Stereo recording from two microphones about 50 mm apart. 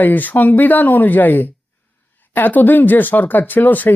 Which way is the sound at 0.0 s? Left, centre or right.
Left.